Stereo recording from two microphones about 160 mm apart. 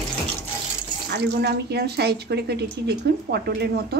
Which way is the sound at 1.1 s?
90° right.